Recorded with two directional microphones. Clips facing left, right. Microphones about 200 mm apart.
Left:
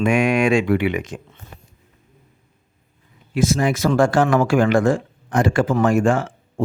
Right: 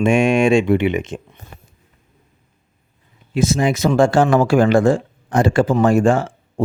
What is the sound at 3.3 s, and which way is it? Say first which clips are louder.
Speech: right 1 dB; 20° right (ahead or behind).